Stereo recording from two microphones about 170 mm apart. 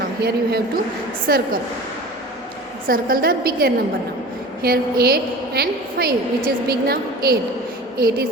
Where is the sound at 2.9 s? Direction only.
60° right (ahead or behind).